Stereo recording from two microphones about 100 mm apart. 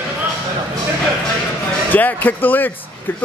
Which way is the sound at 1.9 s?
15° left (ahead or behind).